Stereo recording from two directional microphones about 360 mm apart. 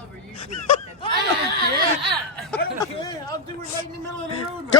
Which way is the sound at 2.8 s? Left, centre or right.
Centre.